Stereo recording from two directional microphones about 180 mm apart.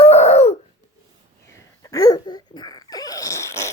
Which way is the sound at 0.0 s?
35° left (ahead or behind).